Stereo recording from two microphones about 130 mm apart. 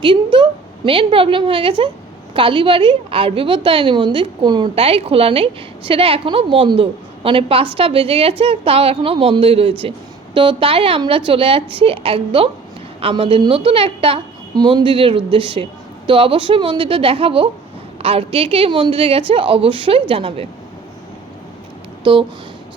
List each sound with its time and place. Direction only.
0.0 s a woman's voice: 40° right (ahead or behind)
14.5 s a woman's voice: 35° right (ahead or behind)
22.0 s speech: 40° right (ahead or behind)